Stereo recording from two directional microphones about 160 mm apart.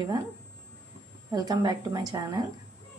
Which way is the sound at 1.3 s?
25° right (ahead or behind).